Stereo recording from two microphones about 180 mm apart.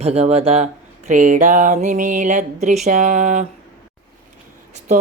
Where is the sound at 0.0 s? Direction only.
35° right (ahead or behind).